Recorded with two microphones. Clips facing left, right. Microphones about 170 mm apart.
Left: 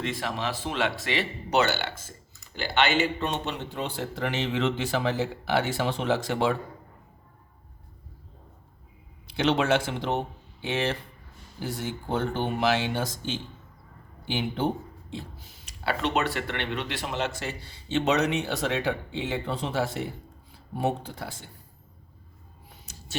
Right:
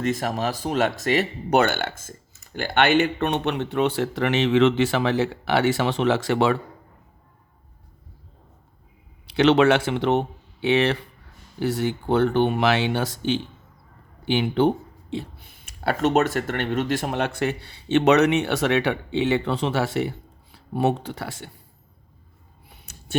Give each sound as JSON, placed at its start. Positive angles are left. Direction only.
{"t": 0.0, "sound": "speech", "side_deg": -45}
{"t": 9.2, "sound": "speech", "side_deg": -70}
{"t": 22.9, "sound": "a sound", "side_deg": -60}